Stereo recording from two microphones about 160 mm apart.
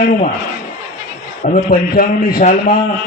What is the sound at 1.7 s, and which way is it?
Speech, 65° left (ahead or behind).